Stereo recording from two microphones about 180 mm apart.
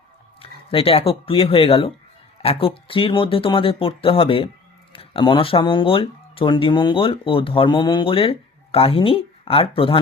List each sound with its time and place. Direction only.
0.7 s speech: 30° left (ahead or behind)